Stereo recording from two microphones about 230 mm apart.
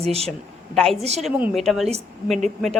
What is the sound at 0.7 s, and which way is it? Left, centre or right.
Speech, centre.